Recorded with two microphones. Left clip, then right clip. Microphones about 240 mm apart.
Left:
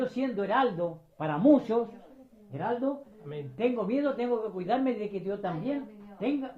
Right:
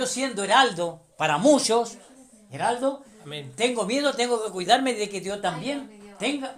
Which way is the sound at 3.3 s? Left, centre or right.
Right.